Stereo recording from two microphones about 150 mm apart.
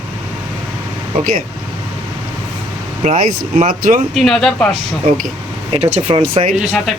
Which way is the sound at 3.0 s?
50° right (ahead or behind).